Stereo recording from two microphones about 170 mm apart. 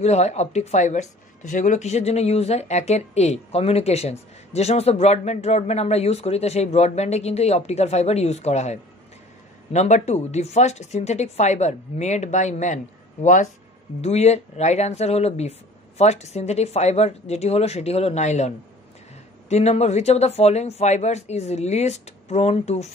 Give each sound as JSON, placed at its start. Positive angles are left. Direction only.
{"t": 0.0, "sound": "a woman's voice", "side_deg": 40}
{"t": 19.5, "sound": "a woman's voice", "side_deg": 40}